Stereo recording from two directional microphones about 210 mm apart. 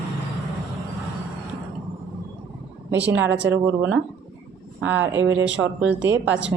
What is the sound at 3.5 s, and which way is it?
Speech, 10° right (ahead or behind).